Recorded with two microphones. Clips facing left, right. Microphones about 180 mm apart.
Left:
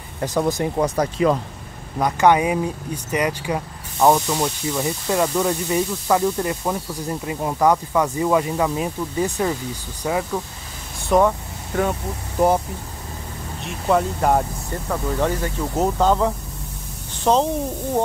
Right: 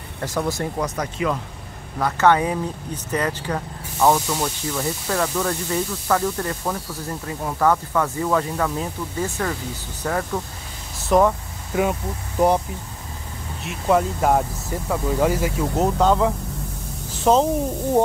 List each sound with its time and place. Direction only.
0.2 s speech: 15° left (ahead or behind)
0.7 s speech: 30° left (ahead or behind)
2.0 s speech: 15° left (ahead or behind); by 11.9 s 5° right (ahead or behind)
13.7 s a woman's voice: centre (ahead or behind)